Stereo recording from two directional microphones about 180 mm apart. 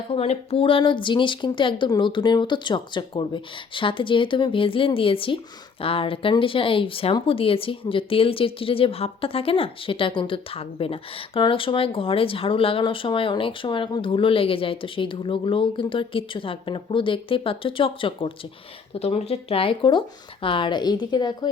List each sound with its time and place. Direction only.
0.1 s speech: 35° left (ahead or behind)